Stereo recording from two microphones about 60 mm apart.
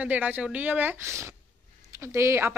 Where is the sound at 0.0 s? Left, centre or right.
Right.